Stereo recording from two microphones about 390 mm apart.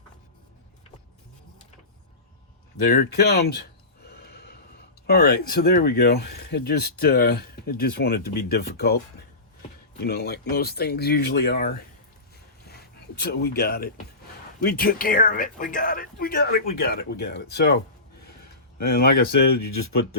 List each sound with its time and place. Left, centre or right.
2.8 s speech: left
10.0 s speech: left
12.6 s a sound: left
14.6 s speech: left
18.8 s speech: left